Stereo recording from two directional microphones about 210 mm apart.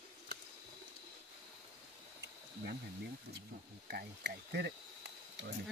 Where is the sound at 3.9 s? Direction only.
50° right (ahead or behind).